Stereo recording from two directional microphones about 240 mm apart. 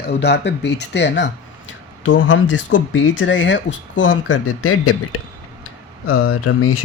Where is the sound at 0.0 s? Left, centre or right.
Left.